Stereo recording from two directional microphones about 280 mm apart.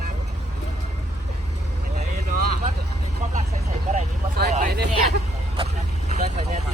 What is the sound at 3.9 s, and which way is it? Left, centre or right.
Speech, right.